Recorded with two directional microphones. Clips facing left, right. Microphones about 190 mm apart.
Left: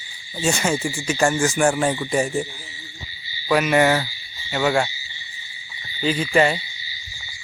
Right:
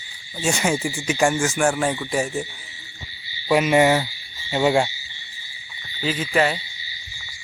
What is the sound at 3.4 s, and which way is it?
Speech, 25° right (ahead or behind).